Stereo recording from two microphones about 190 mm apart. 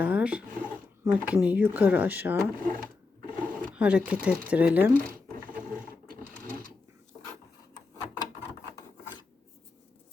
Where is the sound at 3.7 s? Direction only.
5° right (ahead or behind).